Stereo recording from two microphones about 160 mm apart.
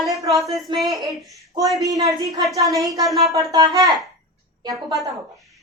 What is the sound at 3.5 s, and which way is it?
Speech, 20° right (ahead or behind).